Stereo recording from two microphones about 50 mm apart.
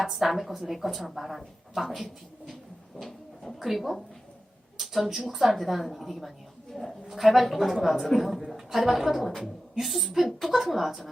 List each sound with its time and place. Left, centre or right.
0.0 s speech: centre